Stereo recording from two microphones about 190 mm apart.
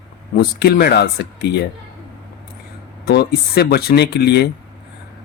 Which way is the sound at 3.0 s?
55° left (ahead or behind).